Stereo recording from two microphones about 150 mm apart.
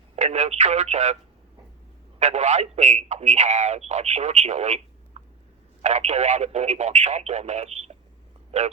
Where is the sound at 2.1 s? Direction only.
50° right (ahead or behind).